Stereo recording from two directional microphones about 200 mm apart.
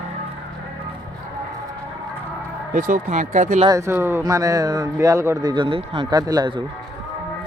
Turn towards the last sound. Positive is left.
turn(degrees=-20)  # may be behind; listen again after turning